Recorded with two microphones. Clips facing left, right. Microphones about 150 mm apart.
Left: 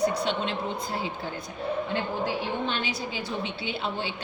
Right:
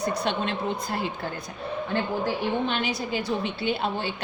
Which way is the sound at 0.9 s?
60° right (ahead or behind).